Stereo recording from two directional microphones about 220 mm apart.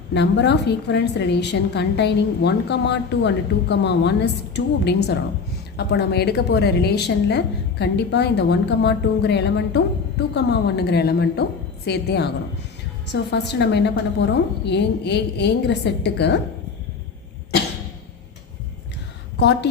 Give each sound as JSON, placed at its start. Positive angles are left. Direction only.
{"t": 0.1, "sound": "a woman's voice", "side_deg": 50}
{"t": 13.3, "sound": "a woman's voice", "side_deg": 50}